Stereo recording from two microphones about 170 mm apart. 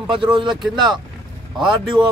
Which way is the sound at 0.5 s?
Centre (ahead or behind).